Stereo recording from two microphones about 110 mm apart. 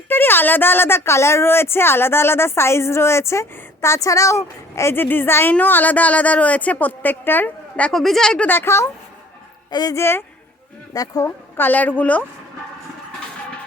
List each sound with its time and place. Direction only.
0.1 s a woman's voice: 20° left (ahead or behind)
7.9 s speech: centre (ahead or behind)
8.4 s a woman's voice: 20° left (ahead or behind)
9.6 s speech: 40° left (ahead or behind)
9.9 s a woman's voice: 25° left (ahead or behind)
10.9 s speech: 35° left (ahead or behind)
11.5 s a woman's voice: 15° left (ahead or behind)